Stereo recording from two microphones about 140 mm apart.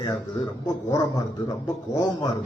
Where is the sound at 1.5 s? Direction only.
25° left (ahead or behind).